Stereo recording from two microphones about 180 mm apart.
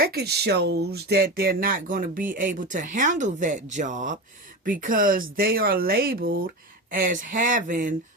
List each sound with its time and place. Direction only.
0.0 s speech: 60° right (ahead or behind)